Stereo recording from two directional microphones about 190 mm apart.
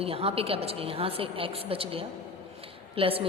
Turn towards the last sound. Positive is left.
turn(degrees=-30)  # may be behind; listen again after turning